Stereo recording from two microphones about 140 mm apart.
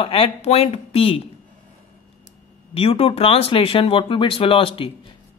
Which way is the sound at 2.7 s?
40° left (ahead or behind).